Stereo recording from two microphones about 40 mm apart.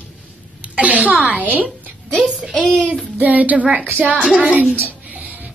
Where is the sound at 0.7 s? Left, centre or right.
Right.